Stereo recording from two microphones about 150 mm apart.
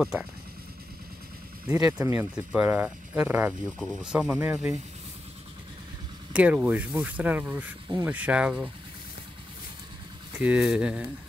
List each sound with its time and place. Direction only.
0.0 s speech: 5° right (ahead or behind)
1.7 s speech: 20° right (ahead or behind)
6.3 s speech: 10° right (ahead or behind)
10.3 s speech: 10° right (ahead or behind)